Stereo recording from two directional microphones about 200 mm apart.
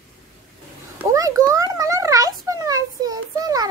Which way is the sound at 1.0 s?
15° right (ahead or behind).